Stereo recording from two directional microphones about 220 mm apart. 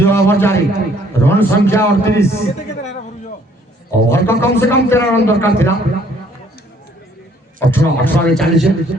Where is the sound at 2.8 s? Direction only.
30° left (ahead or behind).